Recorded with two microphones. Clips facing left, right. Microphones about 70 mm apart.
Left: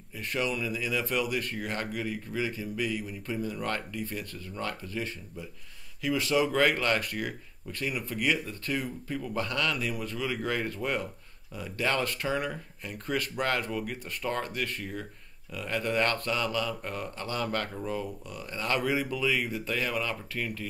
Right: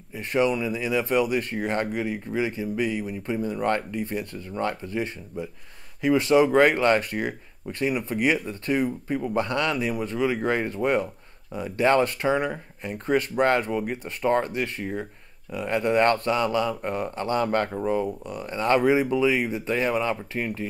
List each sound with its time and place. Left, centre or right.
0.2 s speech: right
2.0 s speech: centre
2.7 s speech: right